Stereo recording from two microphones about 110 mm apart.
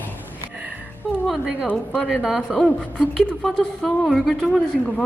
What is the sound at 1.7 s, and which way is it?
Speech, 15° left (ahead or behind).